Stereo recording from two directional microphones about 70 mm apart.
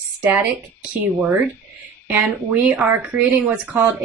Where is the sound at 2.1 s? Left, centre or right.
Right.